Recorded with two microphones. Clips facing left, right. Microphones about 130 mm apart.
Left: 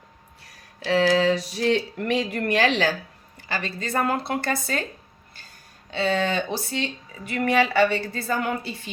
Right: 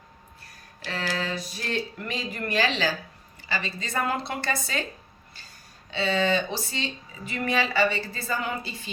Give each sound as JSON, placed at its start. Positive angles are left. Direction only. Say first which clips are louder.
{"t": 0.4, "sound": "a woman's voice", "louder": "left 11 dB", "side_deg": 85}
{"t": 5.9, "sound": "speech", "louder": "left 1 dB", "side_deg": 50}